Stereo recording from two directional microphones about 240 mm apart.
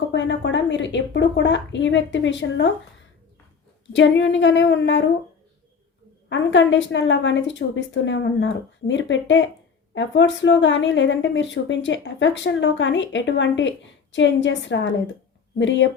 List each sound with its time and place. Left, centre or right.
0.1 s speech: left
3.9 s speech: left
6.2 s speech: left